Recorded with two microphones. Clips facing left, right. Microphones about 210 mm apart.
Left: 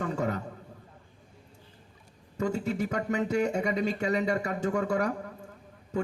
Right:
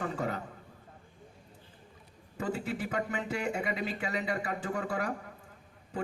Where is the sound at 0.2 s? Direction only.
45° left (ahead or behind).